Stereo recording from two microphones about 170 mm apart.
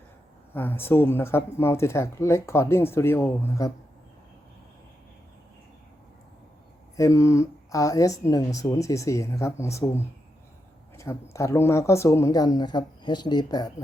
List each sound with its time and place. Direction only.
0.5 s speech: 10° left (ahead or behind)
6.9 s speech: 20° left (ahead or behind)